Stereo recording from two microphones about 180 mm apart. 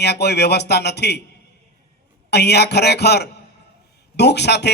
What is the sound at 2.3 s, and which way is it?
A man's voice, 65° left (ahead or behind).